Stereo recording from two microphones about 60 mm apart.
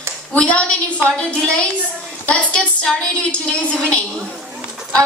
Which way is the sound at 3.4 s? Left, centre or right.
Centre.